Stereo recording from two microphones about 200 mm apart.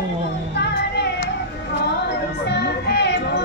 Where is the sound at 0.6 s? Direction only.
60° left (ahead or behind).